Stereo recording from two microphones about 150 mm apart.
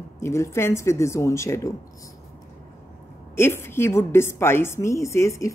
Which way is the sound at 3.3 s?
15° left (ahead or behind).